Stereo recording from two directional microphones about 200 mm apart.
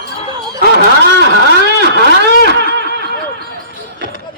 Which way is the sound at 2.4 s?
55° right (ahead or behind).